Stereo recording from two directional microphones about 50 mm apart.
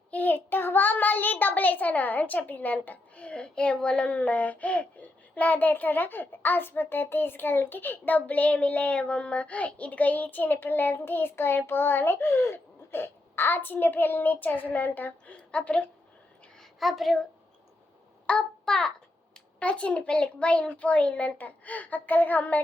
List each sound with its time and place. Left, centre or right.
0.1 s a child's voice: left
15.4 s a woman's voice: left
16.6 s a woman's voice: centre
18.3 s a child's voice: centre
19.5 s a child's voice: left